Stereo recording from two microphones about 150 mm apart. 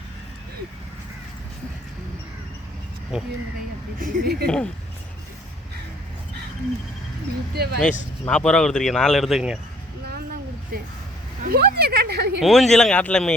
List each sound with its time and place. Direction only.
3.1 s speech: 5° right (ahead or behind)
4.0 s speech: 80° right
4.4 s speech: 5° left (ahead or behind)
7.5 s speech: 90° right
8.3 s speech: 5° left (ahead or behind)
11.4 s speech: 90° right
12.4 s speech: centre (ahead or behind)